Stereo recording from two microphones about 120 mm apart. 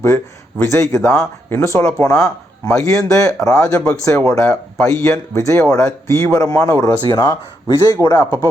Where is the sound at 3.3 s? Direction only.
25° left (ahead or behind).